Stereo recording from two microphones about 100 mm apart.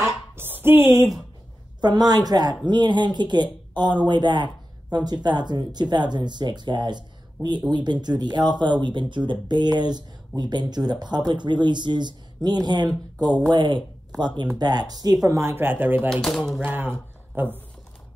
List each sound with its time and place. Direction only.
0.0 s a sound: 20° right (ahead or behind)
1.8 s a woman's voice: 45° right (ahead or behind)
15.2 s speech: 30° right (ahead or behind)
16.1 s speech: 5° left (ahead or behind)
16.6 s speech: 20° right (ahead or behind)